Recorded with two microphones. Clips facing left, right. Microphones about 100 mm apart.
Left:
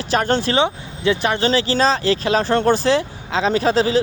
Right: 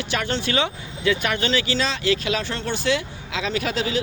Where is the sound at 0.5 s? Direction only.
25° left (ahead or behind).